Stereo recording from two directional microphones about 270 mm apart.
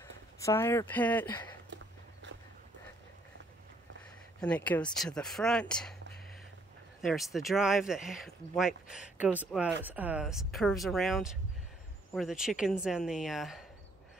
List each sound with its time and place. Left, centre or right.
0.4 s speech: centre
1.7 s a sound: right
4.4 s speech: centre
7.0 s speech: centre